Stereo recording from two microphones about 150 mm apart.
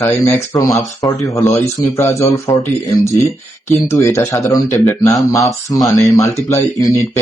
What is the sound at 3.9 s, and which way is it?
Speech, 20° left (ahead or behind).